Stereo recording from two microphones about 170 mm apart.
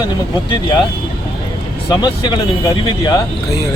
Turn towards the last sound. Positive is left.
turn(degrees=25)  # may be behind; listen again after turning